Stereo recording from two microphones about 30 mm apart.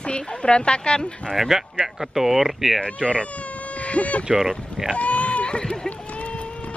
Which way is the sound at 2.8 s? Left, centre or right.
Left.